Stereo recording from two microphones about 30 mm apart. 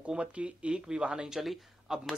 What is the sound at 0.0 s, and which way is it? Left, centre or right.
Speech, right.